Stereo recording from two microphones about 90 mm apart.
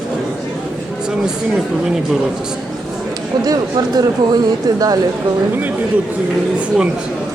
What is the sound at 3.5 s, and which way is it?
Speech, 45° right (ahead or behind).